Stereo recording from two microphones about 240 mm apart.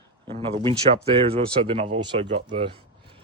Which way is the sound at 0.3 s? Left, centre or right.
Right.